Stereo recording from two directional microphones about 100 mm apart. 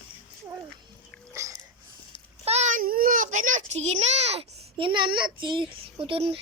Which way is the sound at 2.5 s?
90° right.